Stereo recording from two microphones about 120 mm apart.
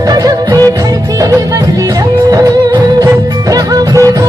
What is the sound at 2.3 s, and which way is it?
Music, 30° right (ahead or behind).